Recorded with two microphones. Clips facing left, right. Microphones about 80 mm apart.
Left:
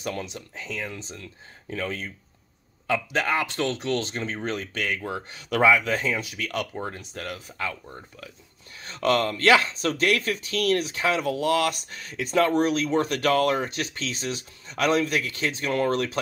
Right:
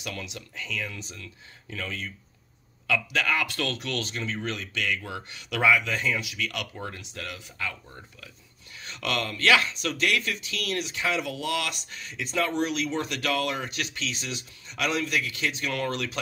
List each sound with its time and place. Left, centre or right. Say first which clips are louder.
0.0 s speech: left 5 dB; left
7.0 s speech: left 4 dB; left
8.7 s speech: left 7 dB; left